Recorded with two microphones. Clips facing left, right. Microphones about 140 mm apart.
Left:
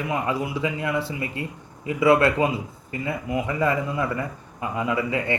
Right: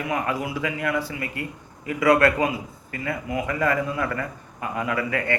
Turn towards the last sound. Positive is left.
turn(degrees=20)  # may be behind; listen again after turning